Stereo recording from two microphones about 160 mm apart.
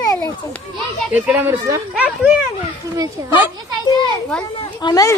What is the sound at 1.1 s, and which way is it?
Speech, 10° right (ahead or behind).